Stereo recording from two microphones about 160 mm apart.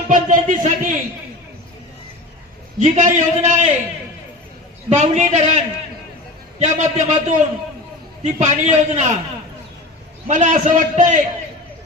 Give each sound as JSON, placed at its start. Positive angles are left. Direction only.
{"t": 0.1, "sound": "a man's voice", "side_deg": -50}
{"t": 2.7, "sound": "a man's voice", "side_deg": -45}
{"t": 4.9, "sound": "a man's voice", "side_deg": -45}
{"t": 10.2, "sound": "a man's voice", "side_deg": -50}